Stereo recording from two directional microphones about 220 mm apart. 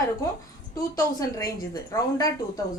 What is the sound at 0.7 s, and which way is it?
A woman's voice, 15° left (ahead or behind).